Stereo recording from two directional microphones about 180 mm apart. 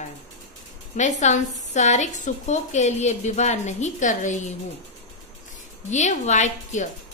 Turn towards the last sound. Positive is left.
turn(degrees=40)  # may be behind; listen again after turning